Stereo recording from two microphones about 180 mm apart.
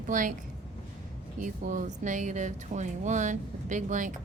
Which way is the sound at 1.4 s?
45° right (ahead or behind).